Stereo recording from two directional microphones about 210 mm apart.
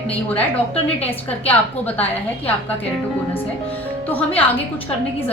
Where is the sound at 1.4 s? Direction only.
10° left (ahead or behind).